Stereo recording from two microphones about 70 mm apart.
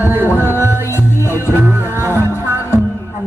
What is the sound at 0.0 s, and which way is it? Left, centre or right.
Music, right.